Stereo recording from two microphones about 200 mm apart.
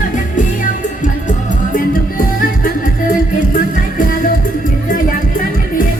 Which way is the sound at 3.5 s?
45° left (ahead or behind).